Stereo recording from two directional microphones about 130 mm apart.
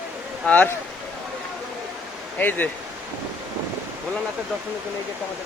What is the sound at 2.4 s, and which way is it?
Speech, 15° left (ahead or behind).